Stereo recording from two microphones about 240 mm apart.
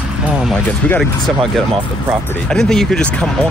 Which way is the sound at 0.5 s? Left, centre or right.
Centre.